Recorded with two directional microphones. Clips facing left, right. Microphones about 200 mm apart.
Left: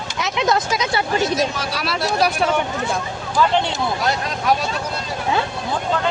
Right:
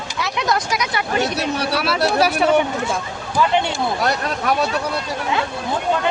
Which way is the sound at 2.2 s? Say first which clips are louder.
Left 2 dB; 5° right (ahead or behind).